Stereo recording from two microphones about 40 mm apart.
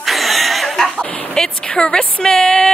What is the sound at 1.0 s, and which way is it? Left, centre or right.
Speech, centre.